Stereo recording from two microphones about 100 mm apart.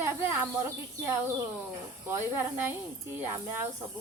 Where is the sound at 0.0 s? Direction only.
25° right (ahead or behind).